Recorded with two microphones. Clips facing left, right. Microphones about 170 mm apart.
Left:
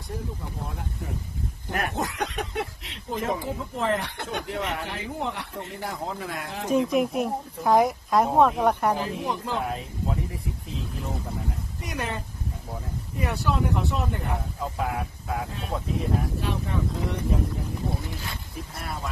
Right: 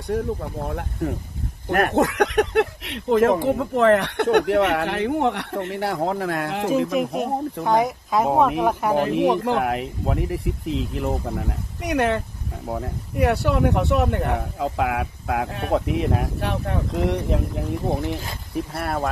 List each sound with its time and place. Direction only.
0.1 s speech: 65° right (ahead or behind)
6.9 s speech: centre (ahead or behind)
8.9 s speech: 70° right (ahead or behind)
18.8 s speech: 65° right (ahead or behind)